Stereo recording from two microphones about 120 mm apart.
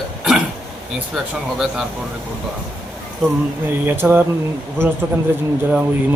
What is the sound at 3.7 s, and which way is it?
Speech, 20° right (ahead or behind).